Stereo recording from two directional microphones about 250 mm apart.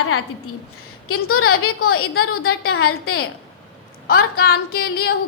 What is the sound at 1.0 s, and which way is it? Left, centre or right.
A woman's voice, left.